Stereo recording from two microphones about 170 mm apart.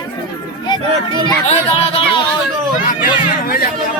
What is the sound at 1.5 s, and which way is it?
Speech, 35° left (ahead or behind).